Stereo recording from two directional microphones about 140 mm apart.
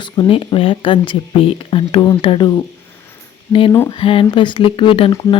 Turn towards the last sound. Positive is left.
turn(degrees=40)  # may be behind; listen again after turning